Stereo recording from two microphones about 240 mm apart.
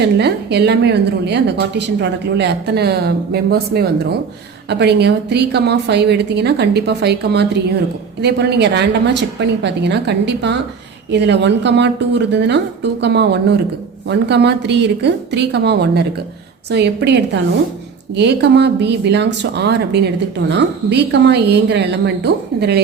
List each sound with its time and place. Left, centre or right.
0.0 s a woman's voice: right